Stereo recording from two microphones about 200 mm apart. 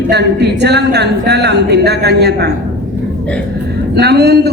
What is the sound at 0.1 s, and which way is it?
A woman's voice, 55° right (ahead or behind).